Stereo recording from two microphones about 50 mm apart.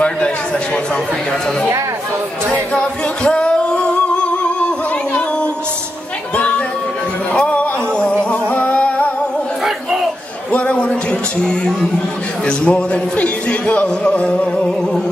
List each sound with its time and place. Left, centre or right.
2.7 s singing: left
7.3 s music: left
10.5 s music: left
12.4 s speech: left